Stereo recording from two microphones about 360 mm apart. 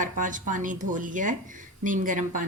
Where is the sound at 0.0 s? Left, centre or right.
Right.